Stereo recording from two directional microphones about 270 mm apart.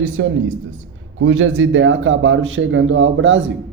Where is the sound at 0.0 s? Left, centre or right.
Right.